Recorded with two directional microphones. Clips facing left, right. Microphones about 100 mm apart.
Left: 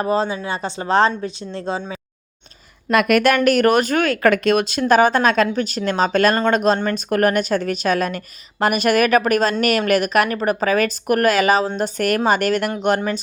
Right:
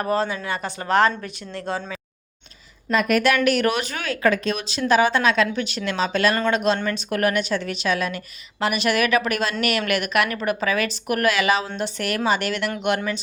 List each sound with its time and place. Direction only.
0.0 s speech: 20° left (ahead or behind)
2.9 s a woman's voice: 70° left (ahead or behind); by 12.7 s 45° left (ahead or behind)